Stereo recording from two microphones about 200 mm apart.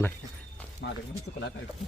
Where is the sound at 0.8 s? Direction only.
60° left (ahead or behind).